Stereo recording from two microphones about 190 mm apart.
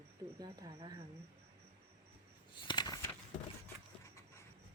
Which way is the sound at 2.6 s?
25° left (ahead or behind).